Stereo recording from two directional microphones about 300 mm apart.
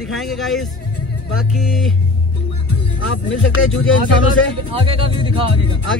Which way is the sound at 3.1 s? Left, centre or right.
Left.